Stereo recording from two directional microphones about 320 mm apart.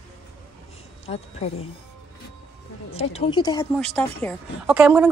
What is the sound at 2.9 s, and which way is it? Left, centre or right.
A woman's voice, centre.